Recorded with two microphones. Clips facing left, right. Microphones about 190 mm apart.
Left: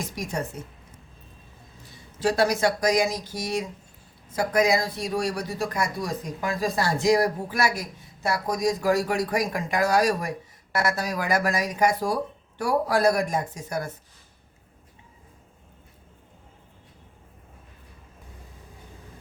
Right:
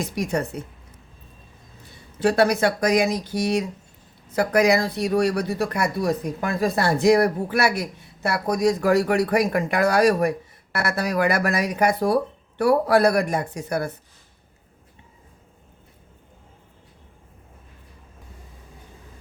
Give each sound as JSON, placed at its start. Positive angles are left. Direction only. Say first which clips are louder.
{"t": 0.0, "sound": "a woman's voice", "louder": "right 6 dB", "side_deg": -65}
{"t": 2.1, "sound": "speech", "louder": "right 4 dB", "side_deg": -60}